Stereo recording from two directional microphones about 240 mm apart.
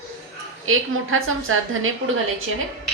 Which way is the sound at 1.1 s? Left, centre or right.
Right.